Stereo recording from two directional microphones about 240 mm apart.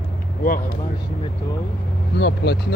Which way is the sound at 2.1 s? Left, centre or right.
Left.